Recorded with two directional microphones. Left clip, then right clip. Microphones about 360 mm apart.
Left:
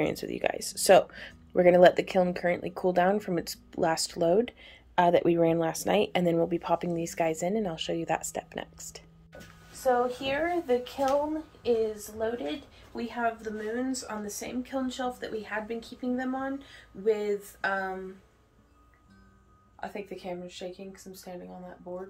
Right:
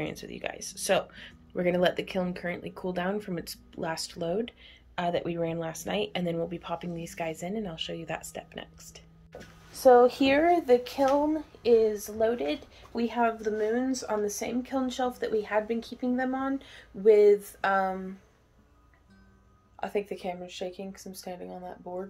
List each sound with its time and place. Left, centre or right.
0.0 s speech: centre
10.0 s a woman's voice: right
19.8 s a woman's voice: right